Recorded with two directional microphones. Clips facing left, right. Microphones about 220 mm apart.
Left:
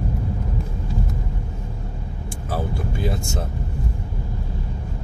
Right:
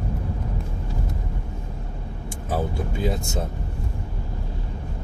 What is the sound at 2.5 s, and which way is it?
Speech, 20° right (ahead or behind).